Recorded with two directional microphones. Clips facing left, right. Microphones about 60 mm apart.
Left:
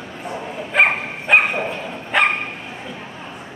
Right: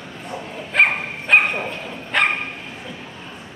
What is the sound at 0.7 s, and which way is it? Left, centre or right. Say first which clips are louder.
Dog: left 1 dB; centre.